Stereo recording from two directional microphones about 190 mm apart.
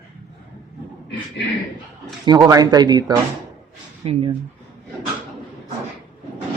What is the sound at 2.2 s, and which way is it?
Speech, 20° right (ahead or behind).